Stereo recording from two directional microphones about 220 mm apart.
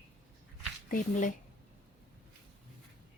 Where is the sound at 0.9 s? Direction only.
35° left (ahead or behind).